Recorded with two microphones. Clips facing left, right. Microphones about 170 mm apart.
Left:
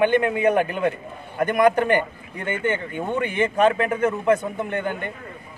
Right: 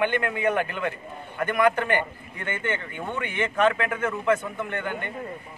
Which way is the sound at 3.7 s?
35° left (ahead or behind).